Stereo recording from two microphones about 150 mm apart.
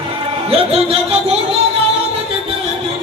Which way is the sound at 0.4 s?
40° right (ahead or behind).